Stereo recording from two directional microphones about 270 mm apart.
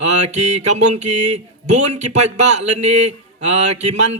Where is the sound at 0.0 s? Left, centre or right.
Right.